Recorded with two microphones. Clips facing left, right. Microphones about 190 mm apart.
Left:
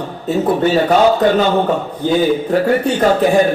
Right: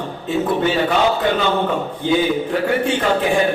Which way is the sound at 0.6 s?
40° left (ahead or behind).